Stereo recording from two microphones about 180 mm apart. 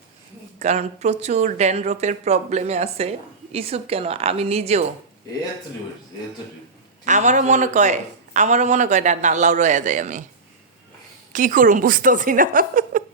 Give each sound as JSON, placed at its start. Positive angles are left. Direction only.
{"t": 0.6, "sound": "speech", "side_deg": -40}
{"t": 7.0, "sound": "speech", "side_deg": -40}
{"t": 11.3, "sound": "a woman's voice", "side_deg": -45}